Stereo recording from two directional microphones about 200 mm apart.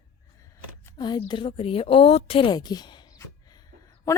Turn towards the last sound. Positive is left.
turn(degrees=15)  # may be behind; listen again after turning